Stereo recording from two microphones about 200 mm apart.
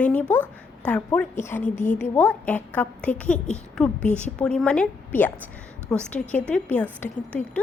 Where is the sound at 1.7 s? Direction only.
35° left (ahead or behind).